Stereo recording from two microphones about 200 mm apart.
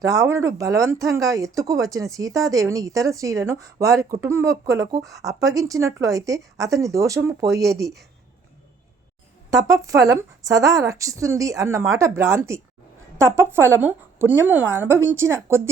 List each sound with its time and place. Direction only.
0.0 s speech: 15° right (ahead or behind)
9.6 s speech: 15° right (ahead or behind)